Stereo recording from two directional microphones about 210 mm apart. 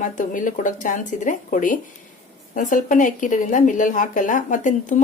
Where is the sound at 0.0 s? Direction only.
40° left (ahead or behind).